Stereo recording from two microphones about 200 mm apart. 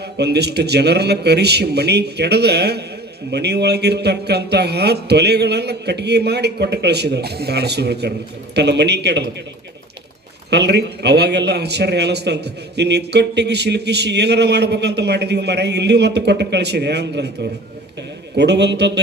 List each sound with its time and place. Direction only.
0.0 s a man's voice: 55° right (ahead or behind)
10.5 s a man's voice: 55° right (ahead or behind)
18.3 s a man's voice: 55° right (ahead or behind)